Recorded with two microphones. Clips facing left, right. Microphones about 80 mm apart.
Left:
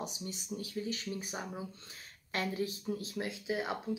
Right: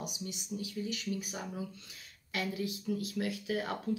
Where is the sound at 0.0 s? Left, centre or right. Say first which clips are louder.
Even; left.